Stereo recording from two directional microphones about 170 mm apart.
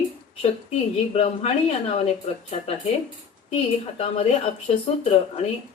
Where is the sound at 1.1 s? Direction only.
35° left (ahead or behind).